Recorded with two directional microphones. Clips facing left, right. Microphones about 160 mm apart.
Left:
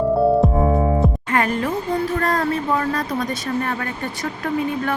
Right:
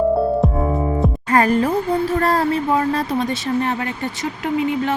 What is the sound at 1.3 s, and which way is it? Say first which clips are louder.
A woman's voice: right 8 dB; 40° right (ahead or behind).